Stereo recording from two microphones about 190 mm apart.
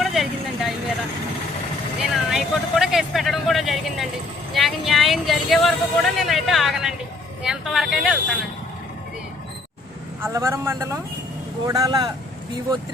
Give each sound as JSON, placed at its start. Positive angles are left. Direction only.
{"t": 0.0, "sound": "vehicle", "side_deg": 0}
{"t": 2.0, "sound": "a sound", "side_deg": 0}
{"t": 4.5, "sound": "speech", "side_deg": 0}
{"t": 10.2, "sound": "speech", "side_deg": -15}